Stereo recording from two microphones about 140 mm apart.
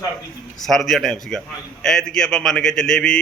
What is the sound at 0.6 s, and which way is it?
A man's voice, centre (ahead or behind).